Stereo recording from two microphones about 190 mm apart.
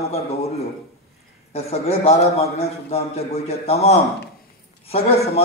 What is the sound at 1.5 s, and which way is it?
A man's voice, 35° left (ahead or behind).